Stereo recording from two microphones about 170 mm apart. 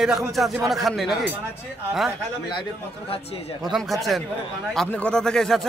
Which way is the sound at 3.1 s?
35° left (ahead or behind).